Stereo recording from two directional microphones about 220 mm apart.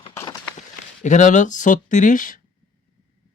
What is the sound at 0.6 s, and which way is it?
Speech, 35° left (ahead or behind).